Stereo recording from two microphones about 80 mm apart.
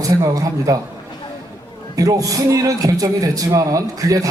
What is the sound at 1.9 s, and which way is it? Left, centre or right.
A man's voice, right.